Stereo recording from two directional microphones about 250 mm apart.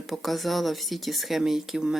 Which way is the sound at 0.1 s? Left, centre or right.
Centre.